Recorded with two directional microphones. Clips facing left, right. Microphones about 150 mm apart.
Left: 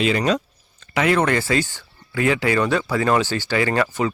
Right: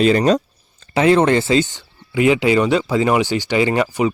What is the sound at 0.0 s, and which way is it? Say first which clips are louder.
Speech: right 6 dB; 40° right (ahead or behind).